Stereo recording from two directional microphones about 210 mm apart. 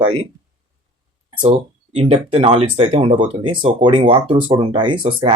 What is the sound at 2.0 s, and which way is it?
Speech, 25° right (ahead or behind).